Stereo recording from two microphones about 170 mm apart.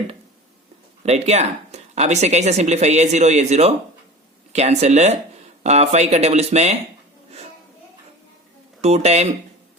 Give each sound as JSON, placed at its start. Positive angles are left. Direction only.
{"t": 1.0, "sound": "speech", "side_deg": -40}
{"t": 8.8, "sound": "speech", "side_deg": -40}